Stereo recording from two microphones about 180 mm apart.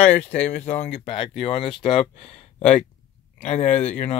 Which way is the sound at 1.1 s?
30° left (ahead or behind).